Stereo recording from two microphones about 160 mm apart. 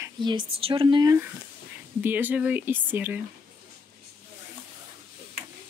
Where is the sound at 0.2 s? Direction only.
30° right (ahead or behind).